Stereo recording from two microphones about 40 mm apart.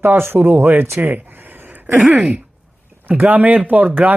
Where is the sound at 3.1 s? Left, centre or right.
Right.